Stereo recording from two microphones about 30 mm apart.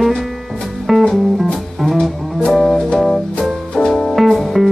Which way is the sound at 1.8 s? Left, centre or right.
Centre.